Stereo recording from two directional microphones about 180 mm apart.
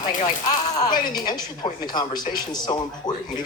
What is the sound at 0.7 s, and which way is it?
Speech, 20° left (ahead or behind).